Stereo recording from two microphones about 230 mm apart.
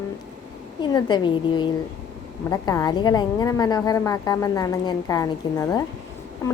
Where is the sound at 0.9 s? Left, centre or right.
Centre.